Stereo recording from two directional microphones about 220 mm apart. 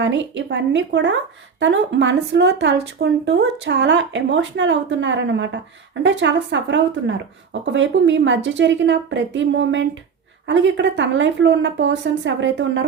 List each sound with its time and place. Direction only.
0.0 s speech: 55° right (ahead or behind)